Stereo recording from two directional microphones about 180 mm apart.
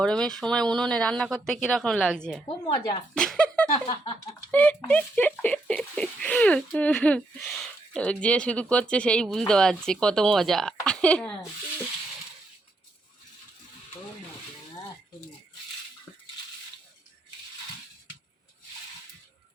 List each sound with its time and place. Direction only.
0.0 s speech: 5° left (ahead or behind)
2.7 s speech: 20° left (ahead or behind)
3.2 s speech: 5° left (ahead or behind)